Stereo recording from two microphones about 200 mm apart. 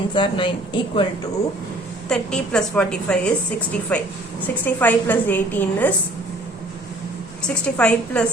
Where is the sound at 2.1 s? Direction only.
5° left (ahead or behind).